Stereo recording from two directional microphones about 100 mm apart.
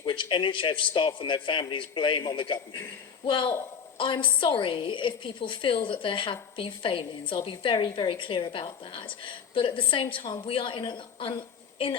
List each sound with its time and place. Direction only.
0.0 s a man's voice: 55° left (ahead or behind)